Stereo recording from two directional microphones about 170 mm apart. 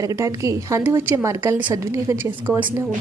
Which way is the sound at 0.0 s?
20° right (ahead or behind).